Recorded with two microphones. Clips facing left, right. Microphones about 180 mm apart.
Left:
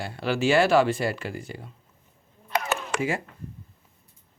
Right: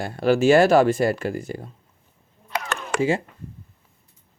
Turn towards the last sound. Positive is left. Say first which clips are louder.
# right 6 dB
turn(degrees=-25)  # may be behind; listen again after turning